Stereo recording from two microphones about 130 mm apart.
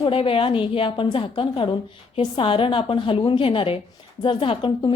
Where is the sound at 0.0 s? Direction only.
45° left (ahead or behind).